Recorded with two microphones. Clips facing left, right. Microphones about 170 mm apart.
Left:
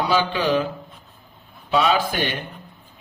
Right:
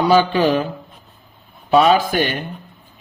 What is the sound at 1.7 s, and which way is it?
Speech, 50° right (ahead or behind).